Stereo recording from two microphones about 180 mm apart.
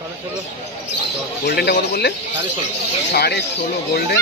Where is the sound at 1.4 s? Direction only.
70° left (ahead or behind).